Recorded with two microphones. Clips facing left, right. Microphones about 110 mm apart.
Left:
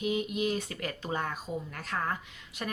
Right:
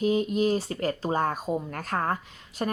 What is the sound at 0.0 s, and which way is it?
A woman's voice, 35° right (ahead or behind).